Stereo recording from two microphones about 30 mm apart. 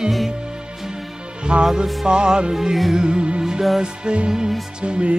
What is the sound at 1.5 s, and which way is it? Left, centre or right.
Music, right.